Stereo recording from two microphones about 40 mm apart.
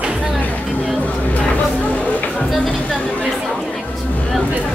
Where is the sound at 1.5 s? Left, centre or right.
Left.